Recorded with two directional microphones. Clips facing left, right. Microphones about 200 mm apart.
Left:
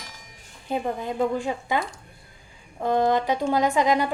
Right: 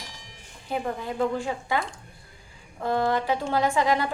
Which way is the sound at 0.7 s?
20° left (ahead or behind).